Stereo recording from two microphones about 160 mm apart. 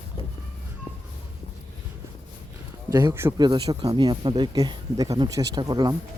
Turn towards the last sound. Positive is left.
turn(degrees=-25)  # may be behind; listen again after turning